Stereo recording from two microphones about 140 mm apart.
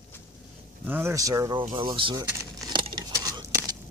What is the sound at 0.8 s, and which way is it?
Speech, 15° right (ahead or behind).